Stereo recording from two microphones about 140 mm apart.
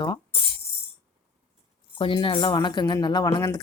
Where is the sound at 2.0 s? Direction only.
40° left (ahead or behind).